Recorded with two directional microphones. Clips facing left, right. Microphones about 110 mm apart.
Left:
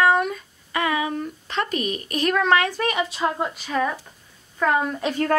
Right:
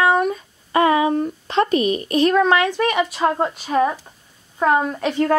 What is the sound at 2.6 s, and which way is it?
Speech, 35° right (ahead or behind).